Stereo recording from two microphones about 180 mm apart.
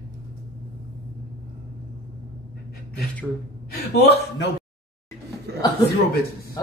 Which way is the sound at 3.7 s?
65° left (ahead or behind).